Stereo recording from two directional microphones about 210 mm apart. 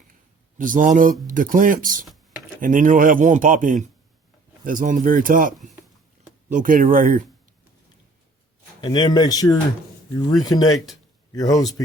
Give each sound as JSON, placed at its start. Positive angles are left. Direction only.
{"t": 0.6, "sound": "speech", "side_deg": -40}
{"t": 8.8, "sound": "speech", "side_deg": 20}